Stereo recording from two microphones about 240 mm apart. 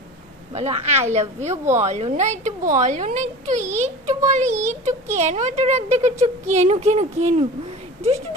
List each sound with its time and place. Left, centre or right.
0.5 s a woman's voice: right